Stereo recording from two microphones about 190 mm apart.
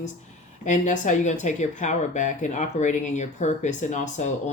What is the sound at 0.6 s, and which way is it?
Speech, 40° left (ahead or behind).